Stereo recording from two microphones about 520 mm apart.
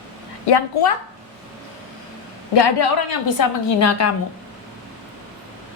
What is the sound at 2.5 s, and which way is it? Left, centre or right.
Speech, left.